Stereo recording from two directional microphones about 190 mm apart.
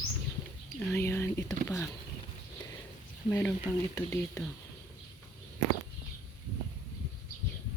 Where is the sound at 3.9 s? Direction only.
15° left (ahead or behind).